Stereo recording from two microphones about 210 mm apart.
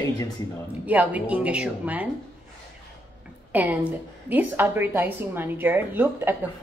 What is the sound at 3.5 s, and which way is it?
A woman's voice, 5° right (ahead or behind).